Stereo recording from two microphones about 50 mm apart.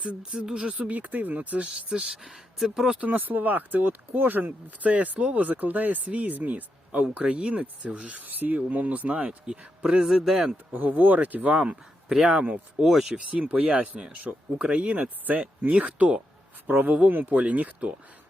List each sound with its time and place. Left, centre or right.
0.0 s speech: centre
0.9 s speech: right
1.9 s speech: centre
2.9 s speech: right
9.5 s speech: centre
10.7 s speech: right
12.0 s speech: centre
12.3 s speech: right
12.8 s speech: centre
13.1 s speech: right
16.6 s speech: right